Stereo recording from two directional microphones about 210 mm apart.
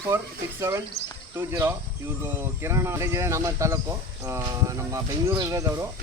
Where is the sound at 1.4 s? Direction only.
10° right (ahead or behind).